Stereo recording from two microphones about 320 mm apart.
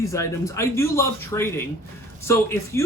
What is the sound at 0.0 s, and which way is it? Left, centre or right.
Speech, centre.